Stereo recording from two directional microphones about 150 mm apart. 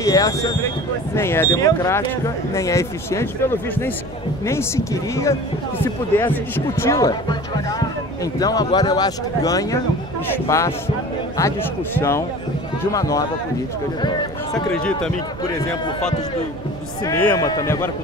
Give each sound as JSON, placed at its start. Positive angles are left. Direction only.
{"t": 0.0, "sound": "speech", "side_deg": 25}
{"t": 12.0, "sound": "speech", "side_deg": 20}
{"t": 17.0, "sound": "speech", "side_deg": 25}